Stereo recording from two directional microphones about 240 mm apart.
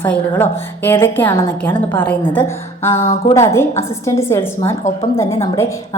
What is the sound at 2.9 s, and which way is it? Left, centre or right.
Speech, left.